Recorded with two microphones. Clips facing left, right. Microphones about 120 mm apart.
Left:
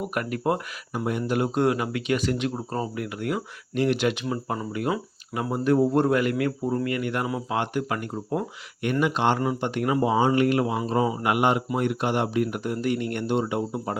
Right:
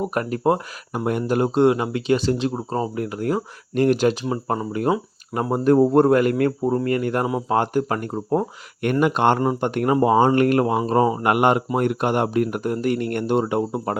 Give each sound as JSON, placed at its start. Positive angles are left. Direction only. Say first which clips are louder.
{"t": 0.0, "sound": "speech", "louder": "right 5 dB", "side_deg": -30}
{"t": 0.9, "sound": "speech", "louder": "right 4 dB", "side_deg": -50}
{"t": 1.4, "sound": "speech", "louder": "right 6 dB", "side_deg": -25}